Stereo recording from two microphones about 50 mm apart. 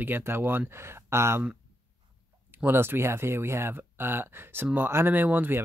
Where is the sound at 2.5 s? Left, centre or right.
Right.